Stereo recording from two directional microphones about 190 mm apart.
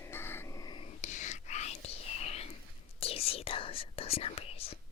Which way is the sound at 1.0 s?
40° left (ahead or behind).